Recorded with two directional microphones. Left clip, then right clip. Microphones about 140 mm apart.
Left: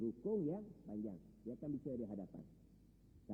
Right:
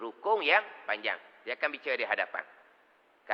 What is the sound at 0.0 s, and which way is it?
A man's voice, 20° left (ahead or behind).